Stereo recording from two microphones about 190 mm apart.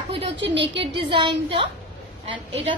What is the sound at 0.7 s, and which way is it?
A woman's voice, 25° right (ahead or behind).